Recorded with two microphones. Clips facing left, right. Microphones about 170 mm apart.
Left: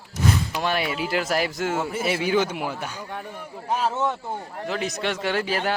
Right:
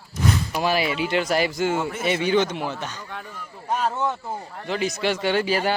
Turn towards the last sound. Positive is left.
turn(degrees=0)  # may be behind; listen again after turning